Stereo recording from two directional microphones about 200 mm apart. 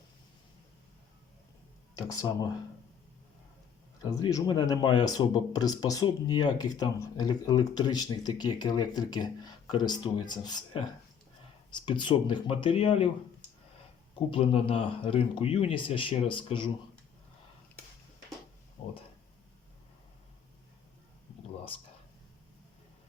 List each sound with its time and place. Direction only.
2.0 s speech: 15° left (ahead or behind)
4.0 s speech: 20° left (ahead or behind)
14.3 s speech: 25° left (ahead or behind)